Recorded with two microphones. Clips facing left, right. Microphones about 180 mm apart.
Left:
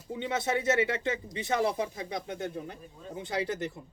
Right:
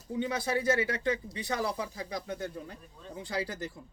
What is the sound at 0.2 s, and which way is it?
Speech, 25° left (ahead or behind).